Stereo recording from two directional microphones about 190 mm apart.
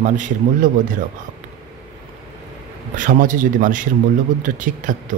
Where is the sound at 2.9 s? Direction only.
45° right (ahead or behind).